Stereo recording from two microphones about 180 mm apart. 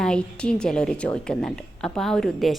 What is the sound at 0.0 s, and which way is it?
A woman's voice, 5° left (ahead or behind).